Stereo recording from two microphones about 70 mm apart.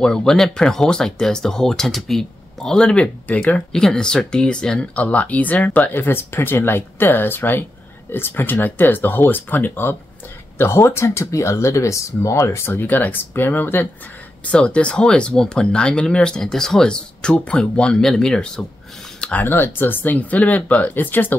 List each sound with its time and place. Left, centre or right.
0.0 s speech: centre; by 12.7 s left
12.7 s speech: left
14.4 s speech: centre
19.3 s speech: left